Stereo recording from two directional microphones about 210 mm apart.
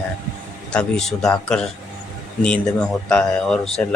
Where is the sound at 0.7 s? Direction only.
5° left (ahead or behind).